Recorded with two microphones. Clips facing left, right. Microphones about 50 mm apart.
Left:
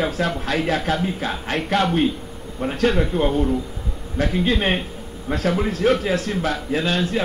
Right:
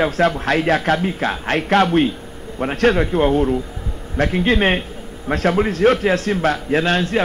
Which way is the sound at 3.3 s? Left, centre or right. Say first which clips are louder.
Right 4 dB; right.